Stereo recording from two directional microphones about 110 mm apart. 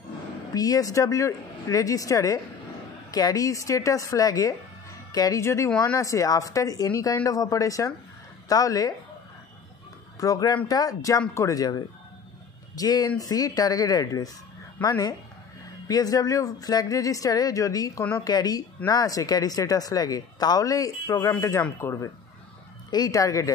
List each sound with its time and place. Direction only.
0.6 s a woman's voice: 35° left (ahead or behind)
10.2 s a woman's voice: 35° left (ahead or behind)
22.8 s speech: 35° left (ahead or behind)